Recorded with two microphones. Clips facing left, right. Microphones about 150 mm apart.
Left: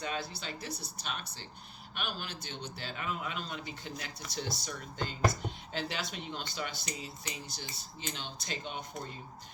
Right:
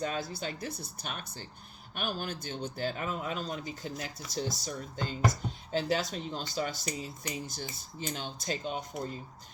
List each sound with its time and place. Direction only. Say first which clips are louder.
0.0 s speech: right 4 dB; 45° right (ahead or behind)